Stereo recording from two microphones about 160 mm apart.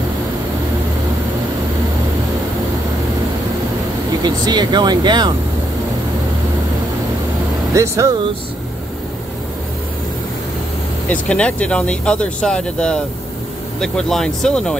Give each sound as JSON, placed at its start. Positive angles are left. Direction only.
{"t": 4.2, "sound": "speech", "side_deg": -25}
{"t": 7.7, "sound": "speech", "side_deg": -20}
{"t": 11.1, "sound": "speech", "side_deg": 5}